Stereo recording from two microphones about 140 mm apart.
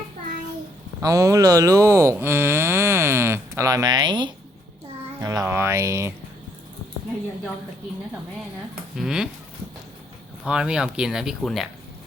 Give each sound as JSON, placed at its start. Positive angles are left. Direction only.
{"t": 1.0, "sound": "speech", "side_deg": -25}
{"t": 9.0, "sound": "speech", "side_deg": -5}
{"t": 10.4, "sound": "speech", "side_deg": -5}